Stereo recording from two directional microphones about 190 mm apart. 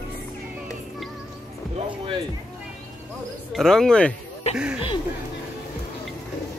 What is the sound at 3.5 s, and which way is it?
Speech, centre (ahead or behind).